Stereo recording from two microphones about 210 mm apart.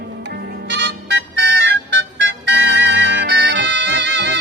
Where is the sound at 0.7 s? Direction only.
55° right (ahead or behind).